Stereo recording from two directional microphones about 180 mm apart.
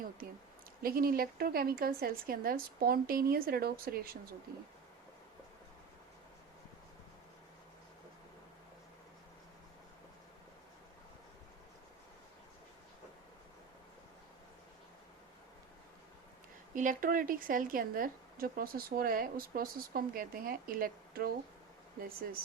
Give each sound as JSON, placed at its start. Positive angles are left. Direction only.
{"t": 0.8, "sound": "speech", "side_deg": -55}
{"t": 16.7, "sound": "speech", "side_deg": -45}